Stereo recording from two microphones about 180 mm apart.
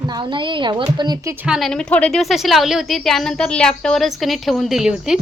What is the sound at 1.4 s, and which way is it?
A woman's voice, centre (ahead or behind).